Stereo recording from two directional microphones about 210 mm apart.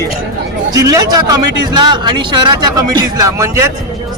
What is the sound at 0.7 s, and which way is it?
A man's voice, 15° right (ahead or behind).